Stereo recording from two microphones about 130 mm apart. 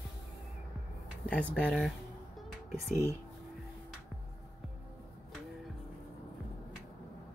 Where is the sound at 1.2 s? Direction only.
10° left (ahead or behind).